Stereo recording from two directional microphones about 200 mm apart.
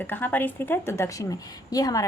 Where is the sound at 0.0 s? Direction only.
10° left (ahead or behind).